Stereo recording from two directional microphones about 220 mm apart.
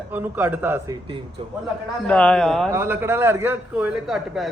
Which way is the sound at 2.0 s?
5° left (ahead or behind).